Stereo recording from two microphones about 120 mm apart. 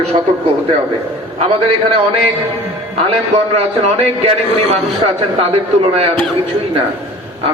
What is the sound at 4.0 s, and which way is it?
A man's voice, 55° right (ahead or behind).